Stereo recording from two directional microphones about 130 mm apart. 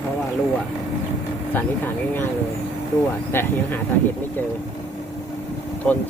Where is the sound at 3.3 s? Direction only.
15° left (ahead or behind).